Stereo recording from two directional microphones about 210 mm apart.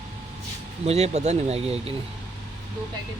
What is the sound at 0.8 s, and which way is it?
Speech, 30° right (ahead or behind).